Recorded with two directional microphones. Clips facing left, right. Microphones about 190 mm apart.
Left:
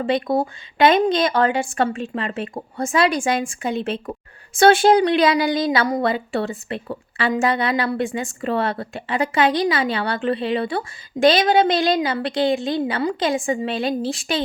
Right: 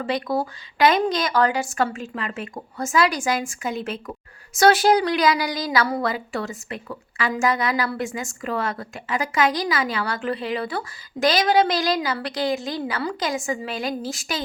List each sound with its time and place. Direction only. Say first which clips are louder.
0.0 s speech: left 4 dB; 25° left (ahead or behind)